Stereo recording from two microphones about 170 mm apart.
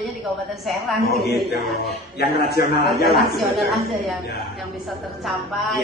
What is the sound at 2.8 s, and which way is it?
A woman's voice, centre (ahead or behind).